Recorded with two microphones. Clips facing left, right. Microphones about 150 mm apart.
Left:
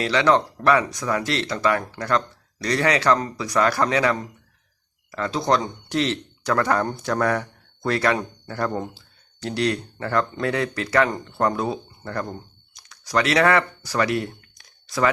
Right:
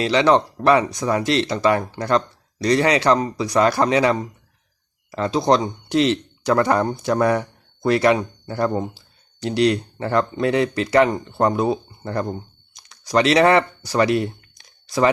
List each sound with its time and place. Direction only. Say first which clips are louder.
0.0 s speech: right 3 dB; 25° right (ahead or behind)